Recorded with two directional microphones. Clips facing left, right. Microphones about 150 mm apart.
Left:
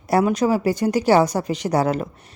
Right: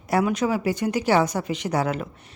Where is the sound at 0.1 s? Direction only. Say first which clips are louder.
Left 4 dB; 35° left (ahead or behind).